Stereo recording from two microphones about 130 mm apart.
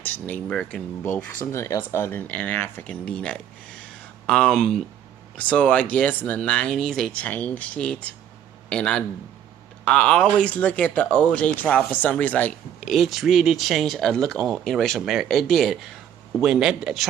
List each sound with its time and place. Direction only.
0.0 s speech: 10° left (ahead or behind)